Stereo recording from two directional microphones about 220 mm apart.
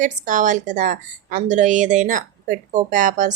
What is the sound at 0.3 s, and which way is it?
Speech, 35° right (ahead or behind).